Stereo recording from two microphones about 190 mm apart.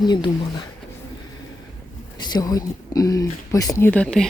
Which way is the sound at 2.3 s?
20° left (ahead or behind).